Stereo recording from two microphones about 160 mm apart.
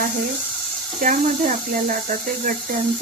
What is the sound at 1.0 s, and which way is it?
Speech, 60° right (ahead or behind).